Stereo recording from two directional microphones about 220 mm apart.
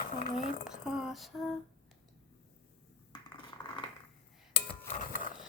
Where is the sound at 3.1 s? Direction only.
20° left (ahead or behind).